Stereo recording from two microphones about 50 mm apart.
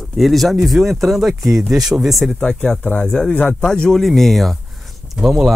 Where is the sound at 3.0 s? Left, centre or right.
Centre.